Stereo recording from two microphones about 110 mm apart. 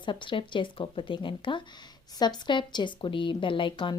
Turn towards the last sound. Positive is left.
turn(degrees=45)  # may be behind; listen again after turning